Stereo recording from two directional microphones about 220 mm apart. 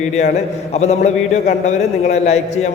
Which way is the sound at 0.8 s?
30° left (ahead or behind).